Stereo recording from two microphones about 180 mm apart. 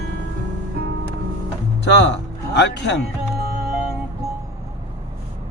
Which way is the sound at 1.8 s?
75° left (ahead or behind).